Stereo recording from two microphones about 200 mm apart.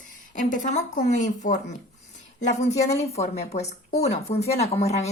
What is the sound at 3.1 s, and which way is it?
Speech, 30° left (ahead or behind).